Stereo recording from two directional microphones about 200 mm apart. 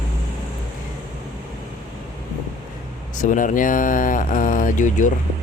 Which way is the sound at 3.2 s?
40° left (ahead or behind).